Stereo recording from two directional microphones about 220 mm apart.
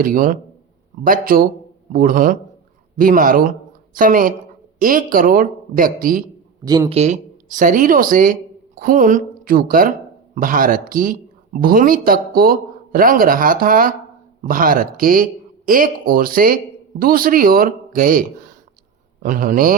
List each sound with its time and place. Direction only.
0.0 s speech: 40° right (ahead or behind)
6.7 s speech: 15° right (ahead or behind)
6.9 s speech: 30° right (ahead or behind)